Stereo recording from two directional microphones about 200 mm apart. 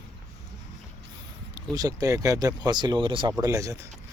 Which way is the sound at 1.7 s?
20° right (ahead or behind).